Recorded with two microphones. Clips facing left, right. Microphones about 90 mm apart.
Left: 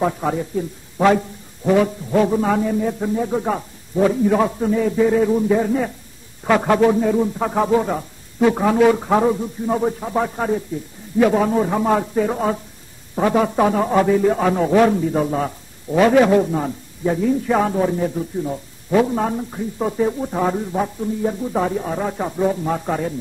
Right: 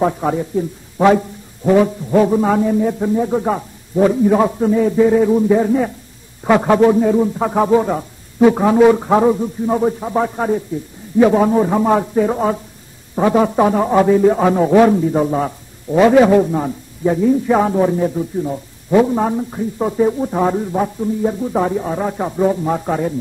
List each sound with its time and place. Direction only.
0.0 s a man's voice: 10° right (ahead or behind)
0.9 s a sound: 10° right (ahead or behind)
2.1 s a man's voice: 15° right (ahead or behind)